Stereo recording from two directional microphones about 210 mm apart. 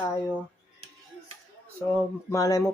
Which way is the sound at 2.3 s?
15° left (ahead or behind).